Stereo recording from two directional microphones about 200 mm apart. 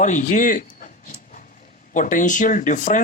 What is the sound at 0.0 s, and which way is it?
Speech, 40° left (ahead or behind).